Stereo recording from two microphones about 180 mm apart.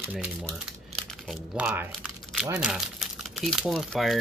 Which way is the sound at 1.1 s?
Centre (ahead or behind).